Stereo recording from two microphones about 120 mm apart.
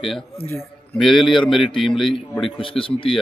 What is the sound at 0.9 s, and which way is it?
A man's voice, centre (ahead or behind).